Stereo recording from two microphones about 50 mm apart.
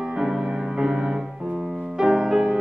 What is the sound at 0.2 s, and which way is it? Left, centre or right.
Music, centre.